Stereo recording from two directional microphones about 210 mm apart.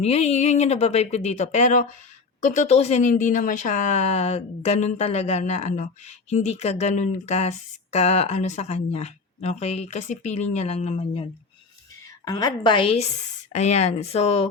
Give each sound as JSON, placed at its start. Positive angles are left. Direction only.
{"t": 0.0, "sound": "speech", "side_deg": 30}
{"t": 12.2, "sound": "a woman's voice", "side_deg": 20}